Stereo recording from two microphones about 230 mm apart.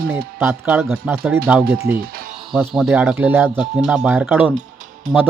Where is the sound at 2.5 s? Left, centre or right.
Centre.